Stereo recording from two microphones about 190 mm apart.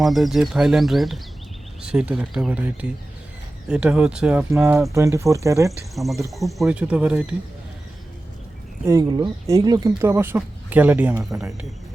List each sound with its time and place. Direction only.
0.0 s speech: centre (ahead or behind); by 5.7 s 15° right (ahead or behind)
5.9 s speech: centre (ahead or behind)
8.9 s speech: 20° right (ahead or behind)